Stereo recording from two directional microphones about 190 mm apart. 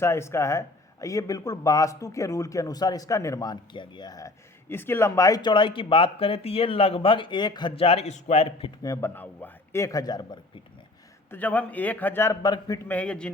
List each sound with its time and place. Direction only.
0.0 s a man's voice: 15° left (ahead or behind); by 8.7 s 30° left (ahead or behind)
8.8 s a man's voice: 15° left (ahead or behind)
11.3 s a man's voice: 10° left (ahead or behind)